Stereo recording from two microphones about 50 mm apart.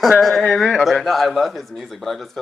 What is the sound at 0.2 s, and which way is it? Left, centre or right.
A man's voice, centre.